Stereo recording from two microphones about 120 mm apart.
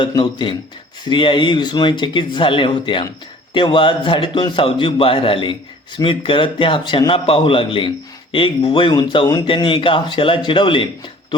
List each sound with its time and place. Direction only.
0.0 s a man's voice: 40° left (ahead or behind)
9.6 s a man's voice: 45° left (ahead or behind)